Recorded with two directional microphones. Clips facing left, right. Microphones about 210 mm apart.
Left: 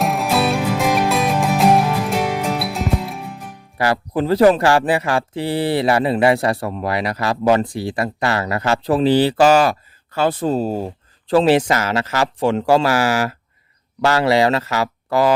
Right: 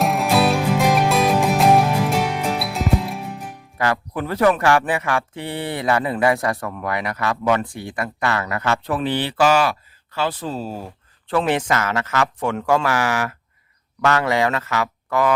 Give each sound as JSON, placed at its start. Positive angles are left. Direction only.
{"t": 0.0, "sound": "music", "side_deg": 0}
{"t": 3.8, "sound": "speech", "side_deg": 35}